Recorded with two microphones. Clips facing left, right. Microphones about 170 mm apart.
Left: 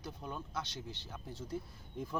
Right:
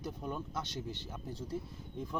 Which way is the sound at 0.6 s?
50° right (ahead or behind).